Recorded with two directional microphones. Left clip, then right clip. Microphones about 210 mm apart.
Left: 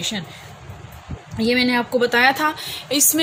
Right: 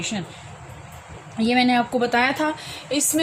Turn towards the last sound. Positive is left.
turn(degrees=50)  # may be behind; listen again after turning